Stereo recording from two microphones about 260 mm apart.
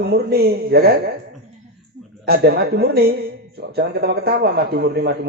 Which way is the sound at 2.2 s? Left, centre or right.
Right.